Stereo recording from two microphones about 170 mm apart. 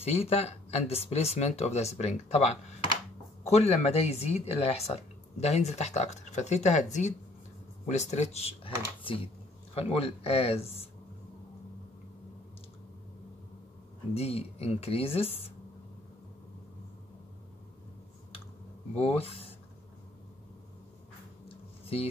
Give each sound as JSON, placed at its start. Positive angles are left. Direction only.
{"t": 0.0, "sound": "speech", "side_deg": 35}
{"t": 14.1, "sound": "speech", "side_deg": 35}
{"t": 18.9, "sound": "speech", "side_deg": 35}
{"t": 21.8, "sound": "speech", "side_deg": 35}